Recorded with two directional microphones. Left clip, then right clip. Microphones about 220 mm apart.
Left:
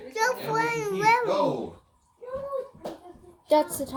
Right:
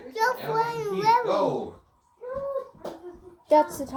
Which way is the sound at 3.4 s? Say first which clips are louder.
Right 2 dB; centre (ahead or behind).